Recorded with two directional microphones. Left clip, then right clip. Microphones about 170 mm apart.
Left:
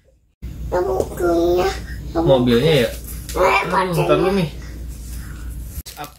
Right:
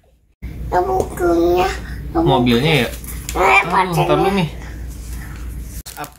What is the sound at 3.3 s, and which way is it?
Speech, 10° right (ahead or behind).